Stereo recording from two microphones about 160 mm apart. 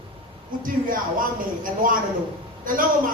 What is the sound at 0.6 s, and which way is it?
Speech, 60° right (ahead or behind).